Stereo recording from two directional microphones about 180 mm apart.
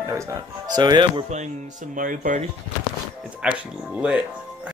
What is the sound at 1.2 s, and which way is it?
Speech, 40° right (ahead or behind).